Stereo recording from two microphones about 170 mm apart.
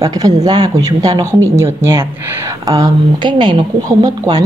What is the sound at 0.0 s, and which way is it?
Speech, 20° right (ahead or behind).